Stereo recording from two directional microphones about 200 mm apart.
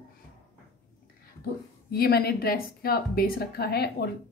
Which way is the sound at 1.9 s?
50° left (ahead or behind).